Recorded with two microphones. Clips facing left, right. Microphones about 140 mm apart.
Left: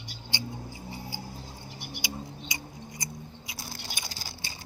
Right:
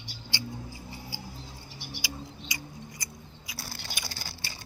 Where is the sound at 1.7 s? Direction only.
50° left (ahead or behind).